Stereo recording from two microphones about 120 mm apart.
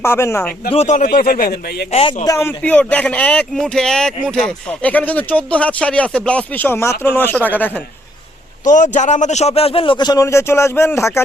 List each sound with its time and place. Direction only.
0.0 s speech: 20° left (ahead or behind)
0.7 s a man's voice: 75° left (ahead or behind)
2.2 s speech: 25° left (ahead or behind)
2.6 s speech: 10° left (ahead or behind)
8.7 s a man's voice: 90° left; by 11.2 s 25° left (ahead or behind)